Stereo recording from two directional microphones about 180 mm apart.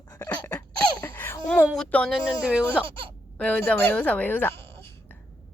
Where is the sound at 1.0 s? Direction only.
15° left (ahead or behind).